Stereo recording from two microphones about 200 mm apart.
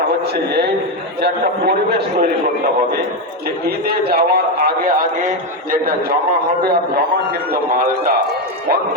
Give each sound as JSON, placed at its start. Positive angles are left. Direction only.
{"t": 1.2, "sound": "a man's voice", "side_deg": -55}
{"t": 3.8, "sound": "a man's voice", "side_deg": -50}